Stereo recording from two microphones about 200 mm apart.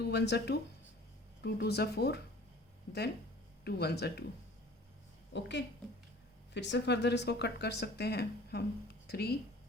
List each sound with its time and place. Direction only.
0.0 s speech: 55° left (ahead or behind)
5.3 s speech: 60° left (ahead or behind)